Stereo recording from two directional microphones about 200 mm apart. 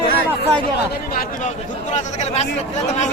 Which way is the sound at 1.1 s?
40° left (ahead or behind).